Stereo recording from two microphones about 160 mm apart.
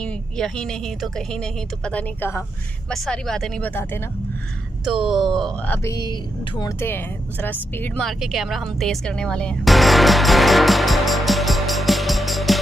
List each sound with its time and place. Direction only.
0.0 s a woman's voice: 5° left (ahead or behind)
2.9 s a woman's voice: 5° left (ahead or behind)
4.8 s a woman's voice: 5° right (ahead or behind)
5.7 s speech: 20° left (ahead or behind)
6.8 s speech: 15° left (ahead or behind)